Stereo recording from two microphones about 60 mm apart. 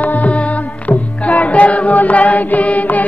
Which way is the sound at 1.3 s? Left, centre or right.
Left.